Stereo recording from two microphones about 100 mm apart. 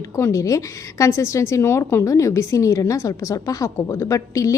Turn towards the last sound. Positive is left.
turn(degrees=35)  # may be behind; listen again after turning